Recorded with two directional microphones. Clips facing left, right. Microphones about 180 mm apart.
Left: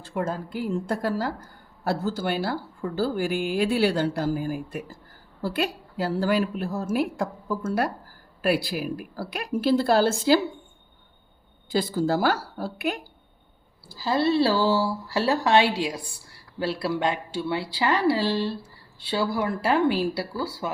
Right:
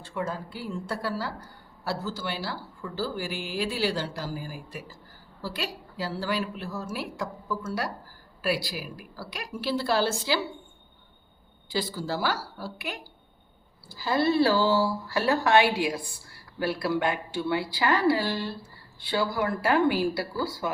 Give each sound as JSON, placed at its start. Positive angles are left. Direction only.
{"t": 0.1, "sound": "a woman's voice", "side_deg": 50}
{"t": 11.7, "sound": "a woman's voice", "side_deg": 50}
{"t": 13.8, "sound": "speech", "side_deg": 30}